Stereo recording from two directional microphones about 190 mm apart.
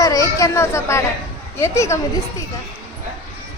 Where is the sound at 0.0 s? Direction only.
20° left (ahead or behind).